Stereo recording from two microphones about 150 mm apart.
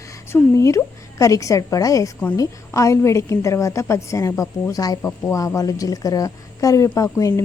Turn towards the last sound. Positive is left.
turn(degrees=20)  # may be behind; listen again after turning